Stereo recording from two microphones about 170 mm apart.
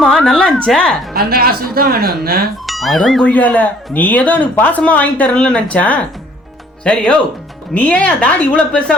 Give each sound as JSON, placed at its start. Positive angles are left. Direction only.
{"t": 0.0, "sound": "a woman's voice", "side_deg": 0}
{"t": 1.1, "sound": "speech", "side_deg": -65}
{"t": 2.6, "sound": "a woman's voice", "side_deg": 0}